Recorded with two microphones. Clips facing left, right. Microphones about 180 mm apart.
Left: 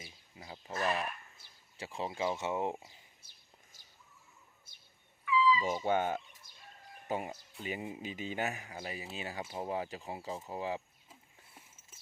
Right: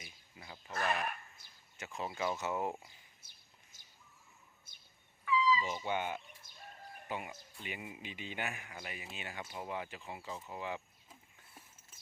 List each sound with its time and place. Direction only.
0.0 s a sound: 30° left (ahead or behind)
1.8 s speech: 30° left (ahead or behind)
5.2 s cat: 40° right (ahead or behind)
5.5 s speech: 45° left (ahead or behind)